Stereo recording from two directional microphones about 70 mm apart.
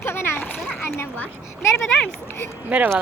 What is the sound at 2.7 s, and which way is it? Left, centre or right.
Speech, right.